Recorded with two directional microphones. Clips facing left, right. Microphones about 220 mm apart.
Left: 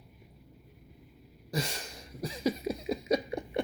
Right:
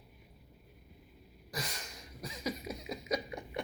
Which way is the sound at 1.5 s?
30° left (ahead or behind).